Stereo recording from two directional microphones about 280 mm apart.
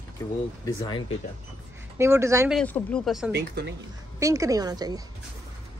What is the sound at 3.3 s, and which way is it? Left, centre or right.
Speech, right.